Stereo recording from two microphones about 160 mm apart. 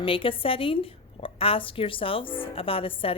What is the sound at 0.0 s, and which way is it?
A woman's voice, 35° left (ahead or behind).